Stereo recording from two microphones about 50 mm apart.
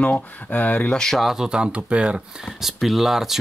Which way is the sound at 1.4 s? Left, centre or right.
Centre.